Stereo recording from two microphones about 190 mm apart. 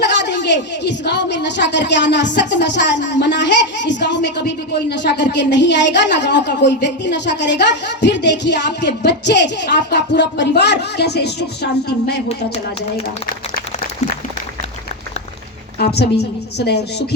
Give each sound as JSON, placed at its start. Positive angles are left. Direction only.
{"t": 0.0, "sound": "a woman's voice", "side_deg": 65}
{"t": 15.8, "sound": "a woman's voice", "side_deg": 60}